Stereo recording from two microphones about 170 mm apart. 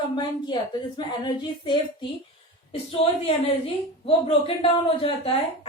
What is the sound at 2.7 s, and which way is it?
Speech, 35° left (ahead or behind).